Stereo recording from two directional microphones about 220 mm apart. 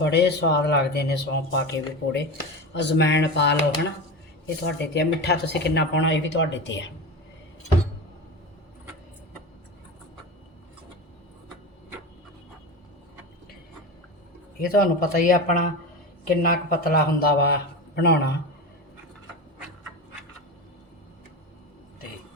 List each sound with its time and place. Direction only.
0.0 s speech: 50° left (ahead or behind)
4.6 s speech: 50° left (ahead or behind)
14.6 s speech: 40° left (ahead or behind)